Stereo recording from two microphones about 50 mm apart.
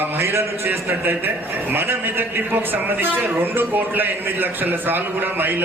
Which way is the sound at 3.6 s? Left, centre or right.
Right.